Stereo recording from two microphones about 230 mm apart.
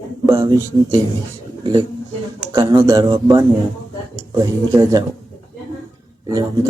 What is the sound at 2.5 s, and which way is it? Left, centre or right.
Speech, centre.